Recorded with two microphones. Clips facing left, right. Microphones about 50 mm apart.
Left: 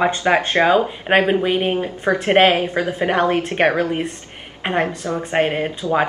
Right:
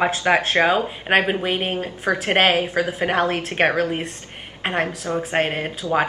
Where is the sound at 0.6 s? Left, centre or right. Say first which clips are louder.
Left 3 dB; centre.